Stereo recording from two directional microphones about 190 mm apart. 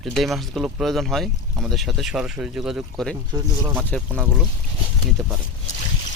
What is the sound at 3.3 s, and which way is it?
Speech, 20° right (ahead or behind).